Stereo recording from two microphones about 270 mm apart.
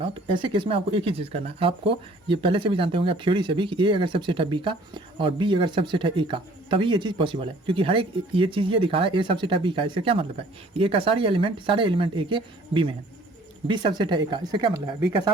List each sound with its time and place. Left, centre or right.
0.0 s speech: centre